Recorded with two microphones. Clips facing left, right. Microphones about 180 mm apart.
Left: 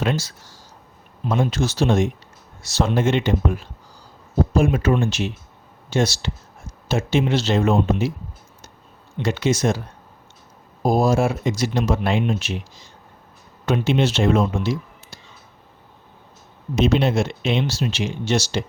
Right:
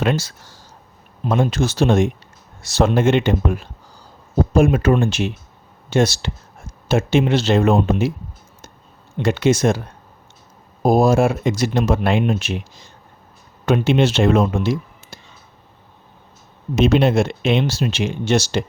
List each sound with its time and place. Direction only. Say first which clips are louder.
0.0 s speech: right 3 dB; 60° right (ahead or behind)
9.1 s speech: right 4 dB; 55° right (ahead or behind)
10.8 s speech: right 4 dB; 55° right (ahead or behind)
13.7 s speech: right 3 dB; 55° right (ahead or behind)
16.8 s speech: right 4 dB; 55° right (ahead or behind)